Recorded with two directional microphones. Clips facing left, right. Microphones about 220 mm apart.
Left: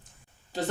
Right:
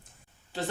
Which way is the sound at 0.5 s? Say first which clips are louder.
Left 3 dB; 40° left (ahead or behind).